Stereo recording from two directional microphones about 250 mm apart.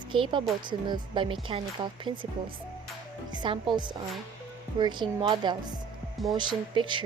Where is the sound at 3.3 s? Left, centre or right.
Centre.